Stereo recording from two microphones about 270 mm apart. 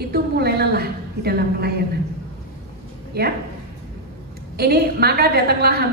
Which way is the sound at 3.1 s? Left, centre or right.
Right.